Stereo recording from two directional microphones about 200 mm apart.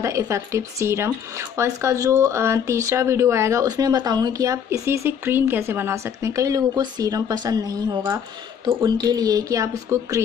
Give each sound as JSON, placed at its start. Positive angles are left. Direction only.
{"t": 0.0, "sound": "speech", "side_deg": -15}